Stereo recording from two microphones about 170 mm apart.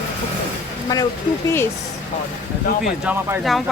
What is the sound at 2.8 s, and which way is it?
Speech, 5° right (ahead or behind).